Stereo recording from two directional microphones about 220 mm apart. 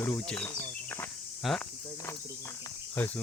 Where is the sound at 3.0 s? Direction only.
10° left (ahead or behind).